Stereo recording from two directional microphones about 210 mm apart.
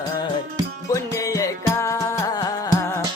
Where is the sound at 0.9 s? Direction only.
15° left (ahead or behind).